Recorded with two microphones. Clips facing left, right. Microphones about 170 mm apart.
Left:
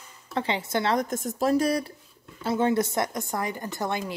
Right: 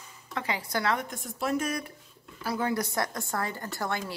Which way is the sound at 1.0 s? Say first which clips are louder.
Left 7 dB; 45° left (ahead or behind).